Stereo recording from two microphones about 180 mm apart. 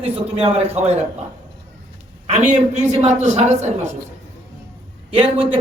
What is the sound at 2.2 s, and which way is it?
A man's voice, 35° right (ahead or behind).